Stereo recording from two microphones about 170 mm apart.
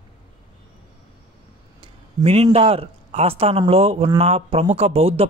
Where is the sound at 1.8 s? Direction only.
35° right (ahead or behind).